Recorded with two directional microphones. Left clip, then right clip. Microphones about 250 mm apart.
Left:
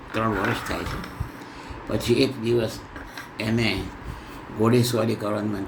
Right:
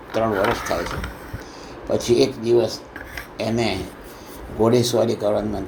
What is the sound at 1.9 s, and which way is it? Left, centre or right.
Speech, centre.